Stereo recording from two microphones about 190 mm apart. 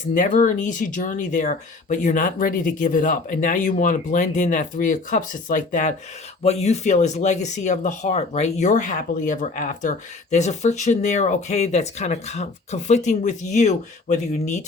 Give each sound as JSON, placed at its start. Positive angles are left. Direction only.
{"t": 0.1, "sound": "speech", "side_deg": 45}